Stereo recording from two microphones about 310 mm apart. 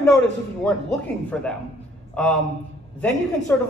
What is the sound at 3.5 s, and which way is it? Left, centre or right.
Speech, centre.